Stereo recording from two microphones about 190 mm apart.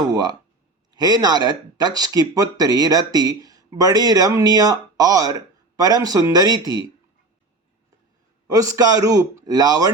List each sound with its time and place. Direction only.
0.0 s speech: 20° right (ahead or behind)
8.7 s speech: 20° right (ahead or behind)